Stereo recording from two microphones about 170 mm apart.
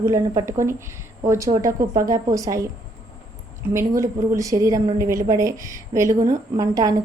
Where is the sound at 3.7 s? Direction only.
15° right (ahead or behind).